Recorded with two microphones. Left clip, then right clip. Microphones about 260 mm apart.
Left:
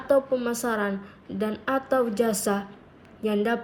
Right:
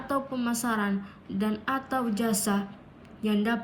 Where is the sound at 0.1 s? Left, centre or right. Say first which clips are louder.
Left 8 dB; centre.